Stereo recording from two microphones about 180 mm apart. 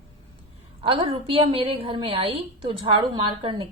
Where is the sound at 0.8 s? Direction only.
30° right (ahead or behind).